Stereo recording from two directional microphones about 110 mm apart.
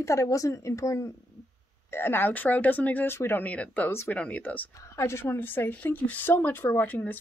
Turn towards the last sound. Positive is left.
turn(degrees=15)  # may be behind; listen again after turning